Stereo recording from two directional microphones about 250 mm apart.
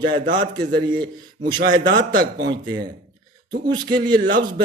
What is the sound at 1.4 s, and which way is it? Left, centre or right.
Speech, right.